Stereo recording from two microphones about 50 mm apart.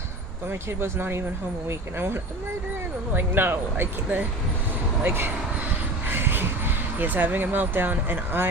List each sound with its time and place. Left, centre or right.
0.8 s speech: right
3.2 s speech: right
6.1 s vehicle: right
7.0 s speech: right